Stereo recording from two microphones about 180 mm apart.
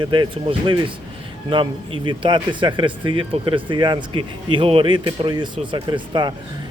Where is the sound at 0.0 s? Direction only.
25° right (ahead or behind).